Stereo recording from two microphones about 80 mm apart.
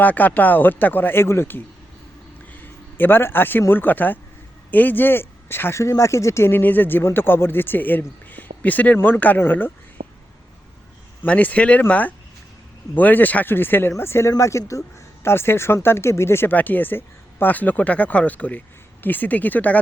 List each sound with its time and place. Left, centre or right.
0.0 s speech: left
2.5 s a sound: left
3.7 s speech: left
11.2 s speech: centre